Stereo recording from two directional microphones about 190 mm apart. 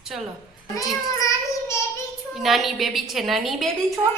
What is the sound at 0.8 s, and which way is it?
Child singing, 15° left (ahead or behind).